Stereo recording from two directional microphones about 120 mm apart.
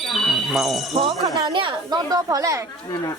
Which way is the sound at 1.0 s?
45° right (ahead or behind).